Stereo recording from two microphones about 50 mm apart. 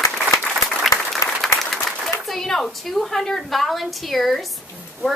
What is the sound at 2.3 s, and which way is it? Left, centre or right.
A woman's voice, centre.